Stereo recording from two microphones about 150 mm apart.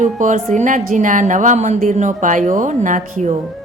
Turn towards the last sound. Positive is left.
turn(degrees=-55)  # may be behind; listen again after turning